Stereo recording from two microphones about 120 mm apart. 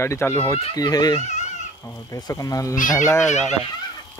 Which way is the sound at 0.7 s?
30° left (ahead or behind).